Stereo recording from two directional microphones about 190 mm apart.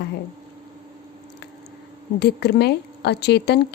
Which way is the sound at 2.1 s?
60° left (ahead or behind).